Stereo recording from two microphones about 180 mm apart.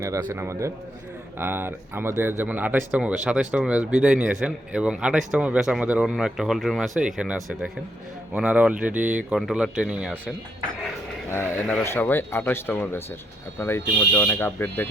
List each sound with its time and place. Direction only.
0.0 s speech: 15° right (ahead or behind)
11.3 s speech: 10° left (ahead or behind)